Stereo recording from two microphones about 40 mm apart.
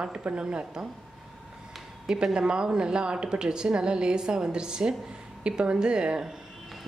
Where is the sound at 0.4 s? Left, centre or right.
Right.